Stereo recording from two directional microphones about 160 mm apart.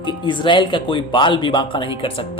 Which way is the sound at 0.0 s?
30° left (ahead or behind).